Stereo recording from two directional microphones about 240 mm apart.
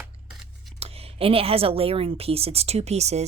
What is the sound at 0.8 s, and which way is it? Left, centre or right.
A woman's voice, right.